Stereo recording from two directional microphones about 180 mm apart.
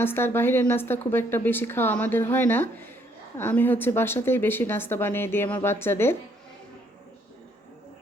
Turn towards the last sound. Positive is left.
turn(degrees=15)  # may be behind; listen again after turning